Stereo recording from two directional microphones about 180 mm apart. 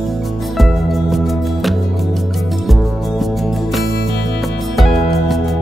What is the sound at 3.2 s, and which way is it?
Music, centre (ahead or behind).